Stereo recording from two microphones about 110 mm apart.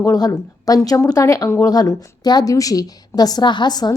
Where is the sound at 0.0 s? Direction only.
35° left (ahead or behind).